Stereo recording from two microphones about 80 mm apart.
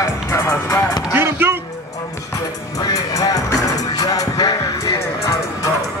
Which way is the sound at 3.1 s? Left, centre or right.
Left.